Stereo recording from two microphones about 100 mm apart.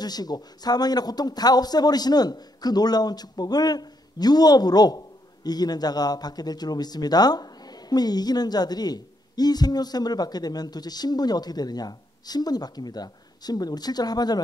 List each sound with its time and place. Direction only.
0.0 s speech: 40° left (ahead or behind)